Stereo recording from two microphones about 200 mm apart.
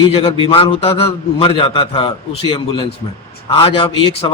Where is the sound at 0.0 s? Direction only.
30° left (ahead or behind).